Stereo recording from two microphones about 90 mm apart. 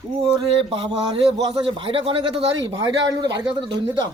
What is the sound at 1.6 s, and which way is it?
Speech, 80° right.